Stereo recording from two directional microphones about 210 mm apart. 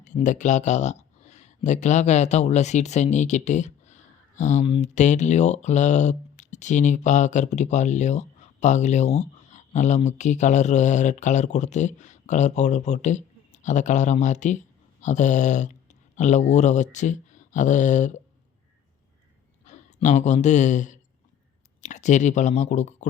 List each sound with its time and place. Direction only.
0.0 s speech: 35° left (ahead or behind)
19.6 s speech: 35° left (ahead or behind)